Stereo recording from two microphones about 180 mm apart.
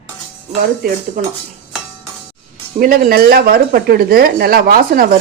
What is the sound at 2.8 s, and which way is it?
A woman's voice, 50° right (ahead or behind).